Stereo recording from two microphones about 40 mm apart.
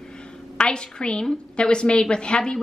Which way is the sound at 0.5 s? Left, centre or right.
Left.